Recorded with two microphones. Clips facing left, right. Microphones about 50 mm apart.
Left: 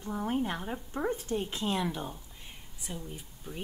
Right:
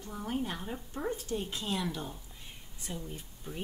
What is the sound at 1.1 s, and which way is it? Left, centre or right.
Speech, left.